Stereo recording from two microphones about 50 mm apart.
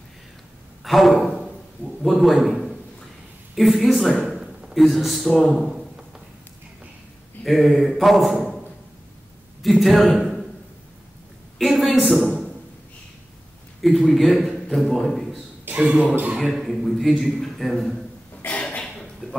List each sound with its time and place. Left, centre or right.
0.8 s a sound: centre
2.0 s a man's voice: centre
3.5 s a sound: centre
4.7 s a man's voice: centre
7.4 s a man's voice: centre
9.6 s a man's voice: centre
11.5 s a sound: centre
13.7 s a man's voice: centre
15.8 s speech: right
16.3 s a man's voice: centre